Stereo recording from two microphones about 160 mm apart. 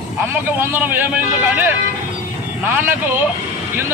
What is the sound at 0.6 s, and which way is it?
A man's voice, 15° right (ahead or behind).